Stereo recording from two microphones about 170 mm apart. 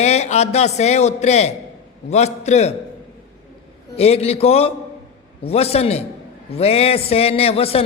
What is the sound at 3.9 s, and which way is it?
A man's voice, 35° left (ahead or behind).